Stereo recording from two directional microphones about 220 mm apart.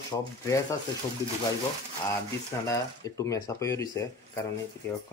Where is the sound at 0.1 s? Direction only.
15° left (ahead or behind).